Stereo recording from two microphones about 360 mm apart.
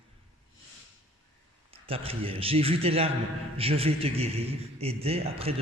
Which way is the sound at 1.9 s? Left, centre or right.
Centre.